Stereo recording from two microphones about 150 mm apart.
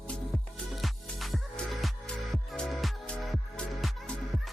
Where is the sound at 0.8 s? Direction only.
Centre (ahead or behind).